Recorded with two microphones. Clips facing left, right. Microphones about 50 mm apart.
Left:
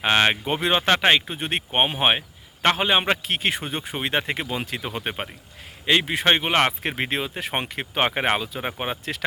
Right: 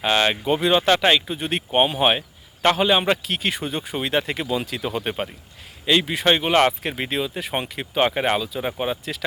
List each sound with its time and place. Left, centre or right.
0.0 s speech: left
4.8 s speech: left